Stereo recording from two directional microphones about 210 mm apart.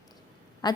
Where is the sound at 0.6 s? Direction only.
20° left (ahead or behind).